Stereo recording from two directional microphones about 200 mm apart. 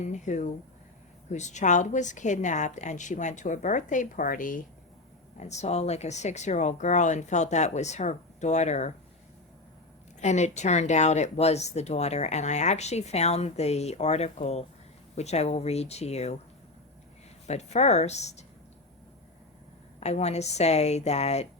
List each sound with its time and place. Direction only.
0.0 s speech: 35° left (ahead or behind)
10.2 s speech: 35° left (ahead or behind)
17.4 s speech: 35° left (ahead or behind)
20.0 s speech: 35° left (ahead or behind)